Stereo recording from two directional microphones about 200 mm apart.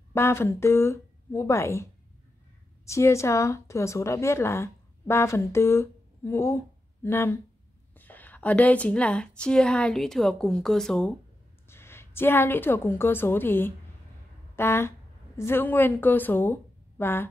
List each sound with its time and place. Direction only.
0.1 s a woman's voice: 10° left (ahead or behind)